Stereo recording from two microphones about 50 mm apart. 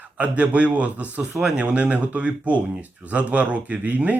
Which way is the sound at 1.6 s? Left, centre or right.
Right.